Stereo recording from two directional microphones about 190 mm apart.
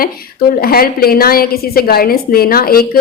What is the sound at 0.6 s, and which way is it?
A woman's voice, 50° left (ahead or behind).